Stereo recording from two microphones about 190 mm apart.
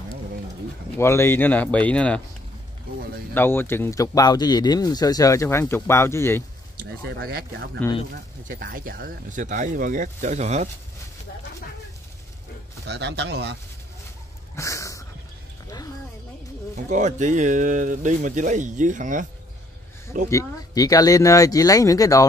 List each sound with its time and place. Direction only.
0.9 s speech: 15° left (ahead or behind)
3.3 s speech: 10° left (ahead or behind)
6.8 s speech: 55° right (ahead or behind)
7.8 s speech: 10° left (ahead or behind)
8.5 s speech: 50° right (ahead or behind)
12.8 s speech: 65° right (ahead or behind)
14.5 s a sound: 15° left (ahead or behind)
16.7 s speech: 40° right (ahead or behind)
20.2 s speech: 15° left (ahead or behind)